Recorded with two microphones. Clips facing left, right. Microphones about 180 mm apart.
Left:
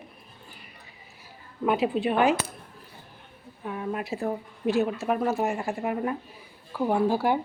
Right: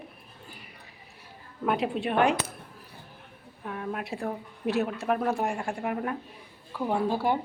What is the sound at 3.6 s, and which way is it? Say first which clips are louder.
A woman's voice: left 3 dB; 5° left (ahead or behind).